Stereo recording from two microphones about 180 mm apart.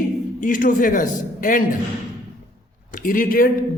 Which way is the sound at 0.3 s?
50° left (ahead or behind).